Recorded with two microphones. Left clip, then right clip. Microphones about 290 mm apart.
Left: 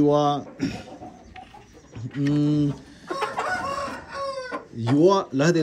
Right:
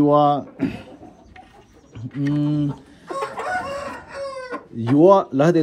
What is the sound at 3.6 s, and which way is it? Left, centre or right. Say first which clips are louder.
Chicken: even; right.